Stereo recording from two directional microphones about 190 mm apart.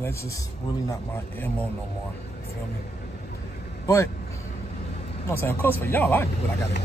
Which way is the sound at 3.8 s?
15° left (ahead or behind).